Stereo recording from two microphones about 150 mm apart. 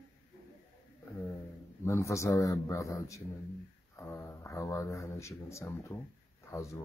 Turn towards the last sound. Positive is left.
turn(degrees=20)  # may be behind; listen again after turning